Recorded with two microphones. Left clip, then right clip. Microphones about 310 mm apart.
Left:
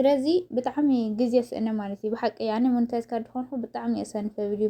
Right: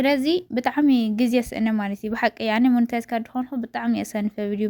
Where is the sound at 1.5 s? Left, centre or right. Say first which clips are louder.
Right 4 dB; right.